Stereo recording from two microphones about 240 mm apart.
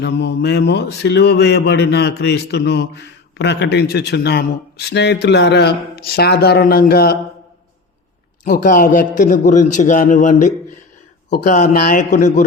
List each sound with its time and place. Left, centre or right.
0.0 s speech: left
8.4 s a man's voice: left